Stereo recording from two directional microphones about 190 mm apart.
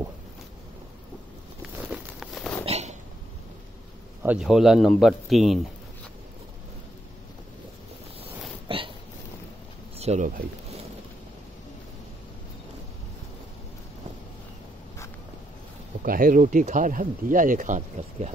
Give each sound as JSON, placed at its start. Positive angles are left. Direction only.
{"t": 1.9, "sound": "a sound", "side_deg": 0}
{"t": 2.6, "sound": "a sound", "side_deg": -35}
{"t": 4.2, "sound": "speech", "side_deg": -5}
{"t": 8.2, "sound": "hiccup", "side_deg": -25}
{"t": 9.9, "sound": "speech", "side_deg": -35}
{"t": 16.0, "sound": "speech", "side_deg": -45}